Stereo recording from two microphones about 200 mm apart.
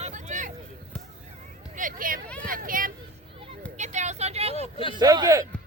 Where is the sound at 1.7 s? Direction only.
40° right (ahead or behind).